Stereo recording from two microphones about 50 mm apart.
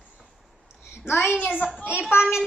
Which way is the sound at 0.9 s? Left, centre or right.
Left.